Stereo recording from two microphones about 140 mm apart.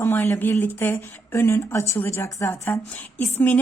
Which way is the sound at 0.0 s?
20° left (ahead or behind).